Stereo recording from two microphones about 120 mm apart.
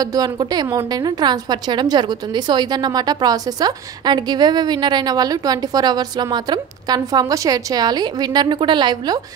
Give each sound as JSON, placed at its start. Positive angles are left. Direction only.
{"t": 0.0, "sound": "a woman's voice", "side_deg": -30}